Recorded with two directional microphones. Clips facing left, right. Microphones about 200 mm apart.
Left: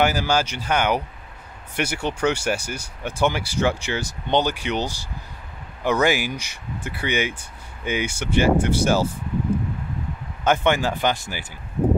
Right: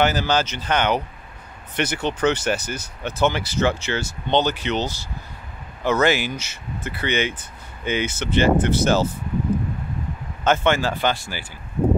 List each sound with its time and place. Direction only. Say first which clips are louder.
0.0 s speech: right 1 dB; 10° left (ahead or behind)
10.4 s speech: even; 15° left (ahead or behind)